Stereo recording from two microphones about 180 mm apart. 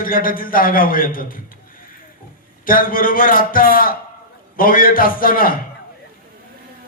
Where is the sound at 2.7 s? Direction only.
50° left (ahead or behind).